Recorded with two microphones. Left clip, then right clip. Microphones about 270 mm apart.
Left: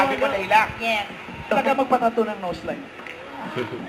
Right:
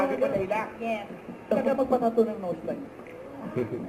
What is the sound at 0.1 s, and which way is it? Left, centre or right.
Music, centre.